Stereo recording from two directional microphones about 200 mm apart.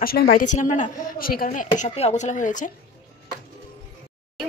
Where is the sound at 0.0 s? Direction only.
50° left (ahead or behind).